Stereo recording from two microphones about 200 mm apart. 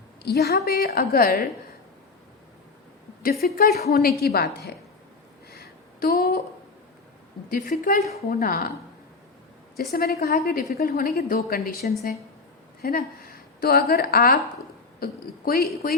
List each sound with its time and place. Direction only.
0.2 s a woman's voice: 55° left (ahead or behind)
3.4 s a woman's voice: 50° left (ahead or behind)
5.5 s a sound: 50° left (ahead or behind)
7.7 s a woman's voice: 40° left (ahead or behind)
9.9 s a woman's voice: 50° left (ahead or behind)